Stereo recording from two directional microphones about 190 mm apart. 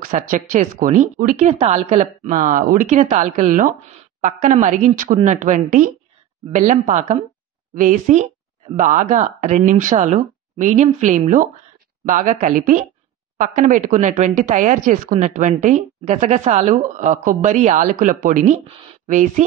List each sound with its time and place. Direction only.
0.0 s a woman's voice: 45° right (ahead or behind)